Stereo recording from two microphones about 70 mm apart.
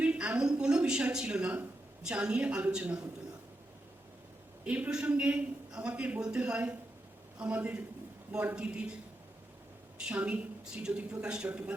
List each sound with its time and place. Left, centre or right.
0.0 s a man's voice: centre
4.6 s a woman's voice: centre
10.0 s a man's voice: centre